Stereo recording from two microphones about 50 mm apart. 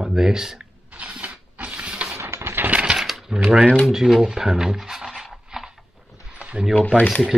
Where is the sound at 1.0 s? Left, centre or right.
Right.